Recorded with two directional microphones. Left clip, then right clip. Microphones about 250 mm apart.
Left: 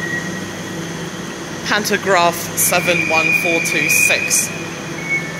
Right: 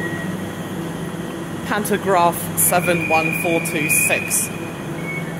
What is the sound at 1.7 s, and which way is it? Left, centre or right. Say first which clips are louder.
Speech: left 3 dB; centre.